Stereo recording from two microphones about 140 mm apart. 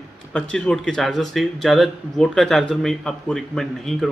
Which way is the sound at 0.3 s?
5° left (ahead or behind).